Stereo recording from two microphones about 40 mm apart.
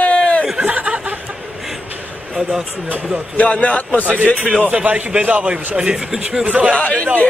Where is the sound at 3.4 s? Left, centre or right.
Left.